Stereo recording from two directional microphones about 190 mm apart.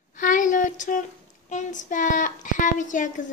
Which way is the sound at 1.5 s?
40° left (ahead or behind).